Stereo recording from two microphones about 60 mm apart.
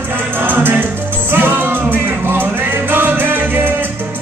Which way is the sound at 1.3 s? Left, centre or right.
Right.